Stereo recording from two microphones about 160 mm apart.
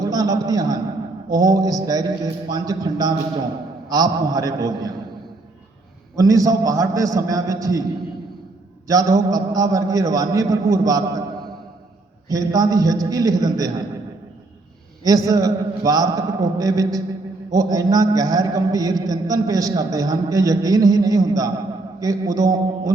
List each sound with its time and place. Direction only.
0.0 s a man's voice: 20° right (ahead or behind)
6.1 s a man's voice: 20° right (ahead or behind)
8.9 s a man's voice: 20° right (ahead or behind)
12.3 s a man's voice: 25° right (ahead or behind)
15.0 s a man's voice: 20° right (ahead or behind)